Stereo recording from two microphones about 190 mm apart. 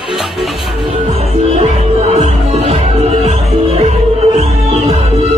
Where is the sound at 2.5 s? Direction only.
35° right (ahead or behind).